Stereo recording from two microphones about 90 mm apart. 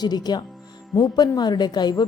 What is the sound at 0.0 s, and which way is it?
Speech, 50° left (ahead or behind).